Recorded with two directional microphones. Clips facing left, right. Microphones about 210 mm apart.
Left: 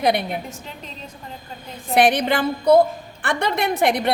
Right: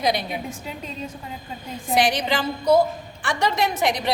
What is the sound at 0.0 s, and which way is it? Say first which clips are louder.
Speech: left 3 dB; 60° left (ahead or behind).